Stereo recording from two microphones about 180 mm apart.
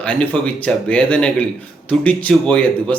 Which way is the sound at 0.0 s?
5° left (ahead or behind).